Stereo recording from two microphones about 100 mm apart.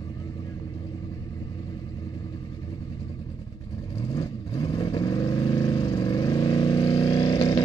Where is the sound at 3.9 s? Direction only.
40° left (ahead or behind).